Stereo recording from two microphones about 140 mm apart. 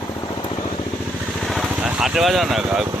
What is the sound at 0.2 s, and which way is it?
Vehicle, 35° left (ahead or behind).